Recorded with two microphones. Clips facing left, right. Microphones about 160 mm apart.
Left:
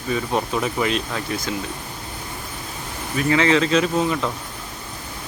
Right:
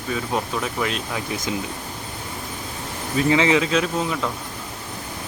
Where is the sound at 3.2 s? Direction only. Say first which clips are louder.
Even; 20° right (ahead or behind).